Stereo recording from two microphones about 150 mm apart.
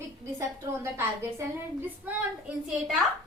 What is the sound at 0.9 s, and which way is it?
Speech, 15° right (ahead or behind).